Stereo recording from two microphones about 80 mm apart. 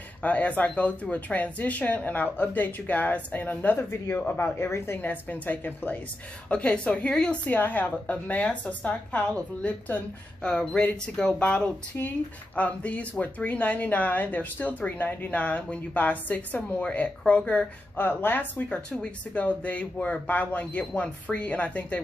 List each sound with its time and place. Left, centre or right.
0.2 s a woman's voice: centre